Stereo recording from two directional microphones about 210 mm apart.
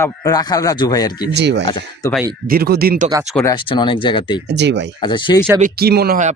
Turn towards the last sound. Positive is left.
turn(degrees=-50)  # may be behind; listen again after turning